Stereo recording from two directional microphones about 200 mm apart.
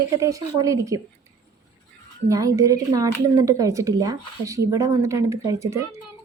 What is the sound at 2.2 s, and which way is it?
Speech, 15° right (ahead or behind).